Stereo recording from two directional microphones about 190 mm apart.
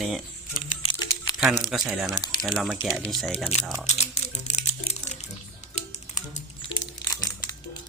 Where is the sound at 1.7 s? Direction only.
Centre (ahead or behind).